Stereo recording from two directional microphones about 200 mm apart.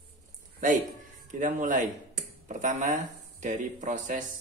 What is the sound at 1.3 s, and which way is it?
Speech, 40° right (ahead or behind).